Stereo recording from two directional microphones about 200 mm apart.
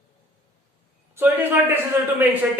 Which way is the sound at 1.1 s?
10° right (ahead or behind).